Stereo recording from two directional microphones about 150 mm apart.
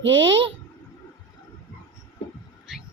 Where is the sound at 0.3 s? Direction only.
35° right (ahead or behind).